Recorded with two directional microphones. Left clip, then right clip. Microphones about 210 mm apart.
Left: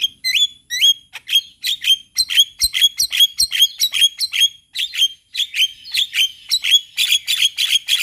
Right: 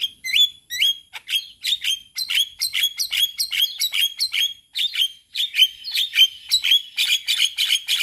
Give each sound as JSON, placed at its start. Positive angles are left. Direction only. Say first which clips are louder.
{"t": 0.0, "sound": "bird", "louder": "left 2 dB", "side_deg": 10}